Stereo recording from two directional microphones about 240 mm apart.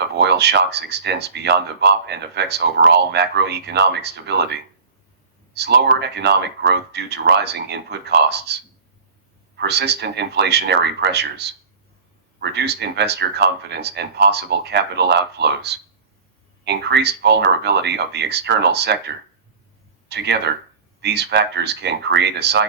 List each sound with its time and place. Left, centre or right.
0.2 s speech: right
5.5 s speech: right
9.6 s speech: right